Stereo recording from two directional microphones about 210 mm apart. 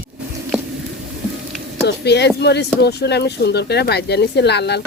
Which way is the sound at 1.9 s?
50° left (ahead or behind).